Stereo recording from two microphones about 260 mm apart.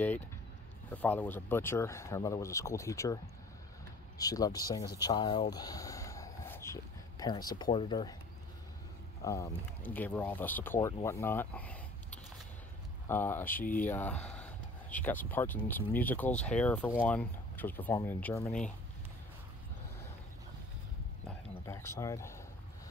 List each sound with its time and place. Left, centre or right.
0.8 s speech: centre
4.2 s speech: centre
9.2 s speech: centre
13.6 s speech: left
13.8 s speech: centre
21.6 s speech: centre